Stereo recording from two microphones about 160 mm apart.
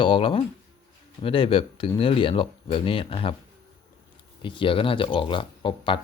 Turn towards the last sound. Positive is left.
turn(degrees=30)  # may be behind; listen again after turning